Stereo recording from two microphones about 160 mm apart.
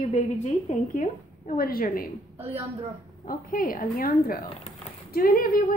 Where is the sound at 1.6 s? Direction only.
65° left (ahead or behind).